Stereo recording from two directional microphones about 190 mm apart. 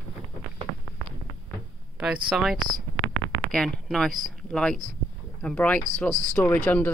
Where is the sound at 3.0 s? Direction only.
90° right.